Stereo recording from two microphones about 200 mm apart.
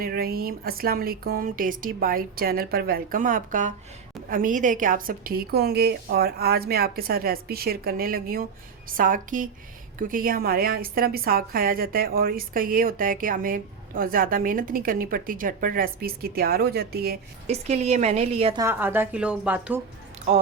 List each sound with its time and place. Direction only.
0.0 s a woman's voice: 50° right (ahead or behind)
17.4 s a woman's voice: 30° right (ahead or behind)
18.6 s a woman's voice: 10° right (ahead or behind)